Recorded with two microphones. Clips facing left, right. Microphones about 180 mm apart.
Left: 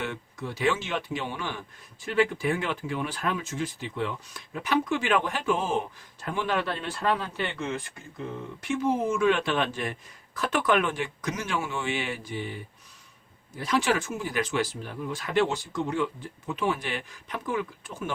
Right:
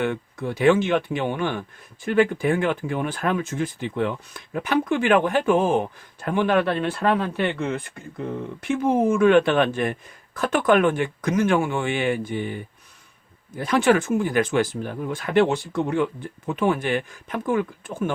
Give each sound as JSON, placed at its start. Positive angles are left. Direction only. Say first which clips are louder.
{"t": 0.0, "sound": "speech", "louder": "right 8 dB", "side_deg": -55}
{"t": 13.6, "sound": "speech", "louder": "right 7 dB", "side_deg": -55}